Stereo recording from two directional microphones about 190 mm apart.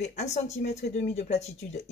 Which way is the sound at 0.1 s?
35° left (ahead or behind).